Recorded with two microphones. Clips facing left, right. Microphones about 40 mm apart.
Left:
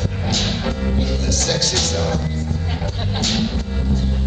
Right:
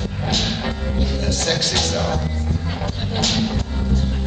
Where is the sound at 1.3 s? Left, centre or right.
Right.